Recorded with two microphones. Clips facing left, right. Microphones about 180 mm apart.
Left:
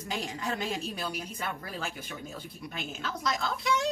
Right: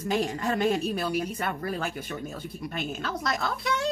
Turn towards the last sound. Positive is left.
turn(degrees=-65)  # may be behind; listen again after turning